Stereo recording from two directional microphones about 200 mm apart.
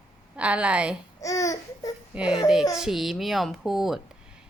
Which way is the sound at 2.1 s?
5° right (ahead or behind).